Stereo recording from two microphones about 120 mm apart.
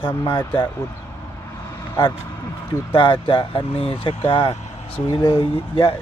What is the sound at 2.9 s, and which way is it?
Speech, 45° left (ahead or behind).